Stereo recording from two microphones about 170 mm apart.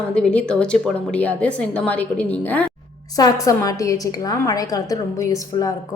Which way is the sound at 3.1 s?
20° left (ahead or behind).